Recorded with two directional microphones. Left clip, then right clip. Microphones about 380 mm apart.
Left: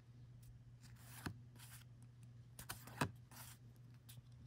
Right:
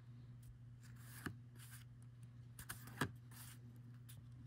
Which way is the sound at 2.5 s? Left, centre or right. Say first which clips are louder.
Left 1 dB; centre.